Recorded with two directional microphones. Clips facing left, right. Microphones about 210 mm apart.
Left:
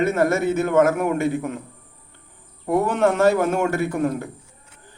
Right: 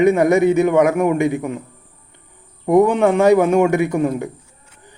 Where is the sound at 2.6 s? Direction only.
15° right (ahead or behind).